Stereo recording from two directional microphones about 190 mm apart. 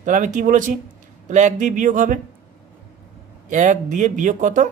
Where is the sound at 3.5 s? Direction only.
40° right (ahead or behind).